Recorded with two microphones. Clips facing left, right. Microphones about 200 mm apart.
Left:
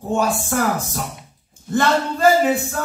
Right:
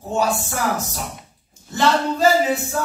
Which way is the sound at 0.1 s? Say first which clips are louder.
Left 2 dB; 55° left (ahead or behind).